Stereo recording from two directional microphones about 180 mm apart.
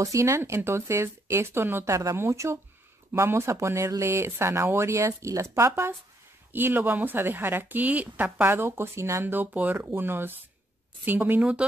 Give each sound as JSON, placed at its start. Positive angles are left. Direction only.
{"t": 0.0, "sound": "speech", "side_deg": -15}